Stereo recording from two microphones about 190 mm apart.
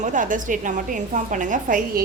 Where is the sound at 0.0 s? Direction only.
45° right (ahead or behind).